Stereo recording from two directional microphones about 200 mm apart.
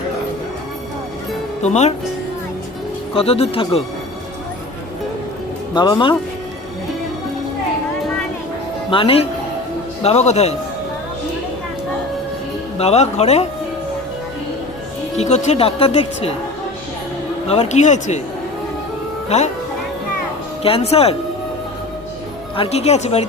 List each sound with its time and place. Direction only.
1.6 s speech: 35° left (ahead or behind)
3.2 s speech: 30° left (ahead or behind)
5.7 s speech: 20° left (ahead or behind)
8.9 s speech: 25° left (ahead or behind)
12.8 s speech: 30° left (ahead or behind)
15.1 s speech: 35° left (ahead or behind)
17.5 s speech: 35° left (ahead or behind)
19.3 s speech: 30° left (ahead or behind)
20.6 s speech: 30° left (ahead or behind)
22.5 s speech: 30° left (ahead or behind)